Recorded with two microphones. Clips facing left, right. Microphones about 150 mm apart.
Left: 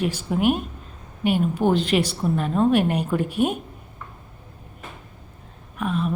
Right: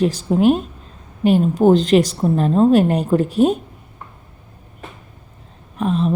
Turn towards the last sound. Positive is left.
turn(degrees=-35)  # may be behind; listen again after turning